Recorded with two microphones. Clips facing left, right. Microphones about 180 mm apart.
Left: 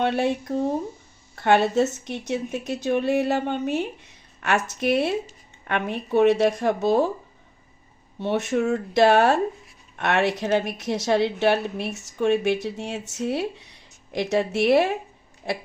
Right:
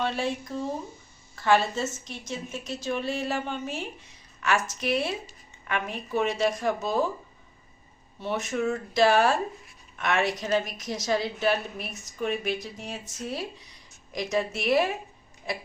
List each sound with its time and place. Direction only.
0.0 s speech: 60° left (ahead or behind)
8.2 s a woman's voice: 65° left (ahead or behind)